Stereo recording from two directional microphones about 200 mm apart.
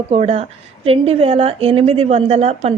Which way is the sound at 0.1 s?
30° right (ahead or behind).